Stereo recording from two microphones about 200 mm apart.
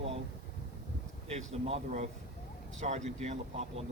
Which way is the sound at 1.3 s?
35° right (ahead or behind).